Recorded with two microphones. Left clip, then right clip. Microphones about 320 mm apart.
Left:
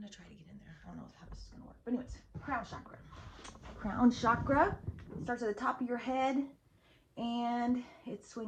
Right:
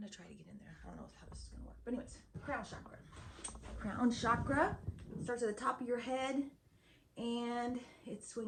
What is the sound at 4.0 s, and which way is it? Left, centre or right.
Speech, centre.